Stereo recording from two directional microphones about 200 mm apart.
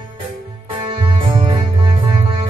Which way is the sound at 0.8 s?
25° right (ahead or behind).